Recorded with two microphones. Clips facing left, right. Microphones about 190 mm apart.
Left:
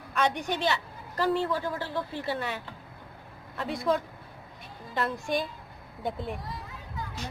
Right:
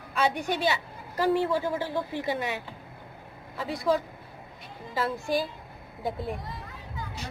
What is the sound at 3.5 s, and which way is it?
A woman's voice, centre (ahead or behind).